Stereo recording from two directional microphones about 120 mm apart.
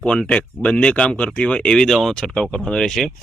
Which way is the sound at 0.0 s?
10° left (ahead or behind).